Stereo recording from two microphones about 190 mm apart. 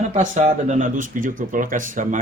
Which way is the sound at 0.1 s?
40° right (ahead or behind).